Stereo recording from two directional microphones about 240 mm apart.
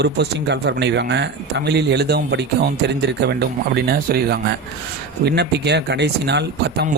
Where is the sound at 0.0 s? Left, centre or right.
Right.